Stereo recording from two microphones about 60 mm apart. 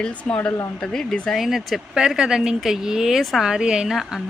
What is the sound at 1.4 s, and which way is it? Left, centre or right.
Speech, centre.